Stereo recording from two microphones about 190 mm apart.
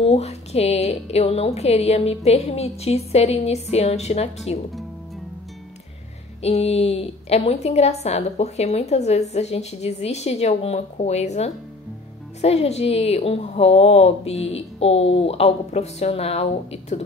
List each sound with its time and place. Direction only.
0.0 s a woman's voice: 35° left (ahead or behind)
6.4 s a woman's voice: 35° left (ahead or behind)